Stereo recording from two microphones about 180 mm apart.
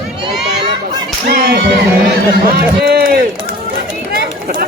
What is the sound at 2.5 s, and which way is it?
Run, 65° right (ahead or behind).